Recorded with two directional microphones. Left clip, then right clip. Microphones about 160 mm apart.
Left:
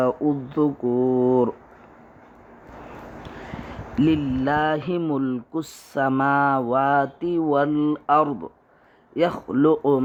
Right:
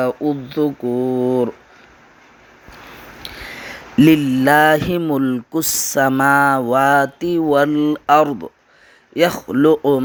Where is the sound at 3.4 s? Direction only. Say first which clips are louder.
Right 6 dB; 40° right (ahead or behind).